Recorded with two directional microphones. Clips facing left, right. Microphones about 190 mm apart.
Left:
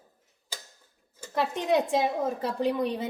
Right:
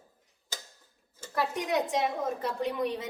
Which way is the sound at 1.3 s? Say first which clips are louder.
Left 4 dB; 25° left (ahead or behind).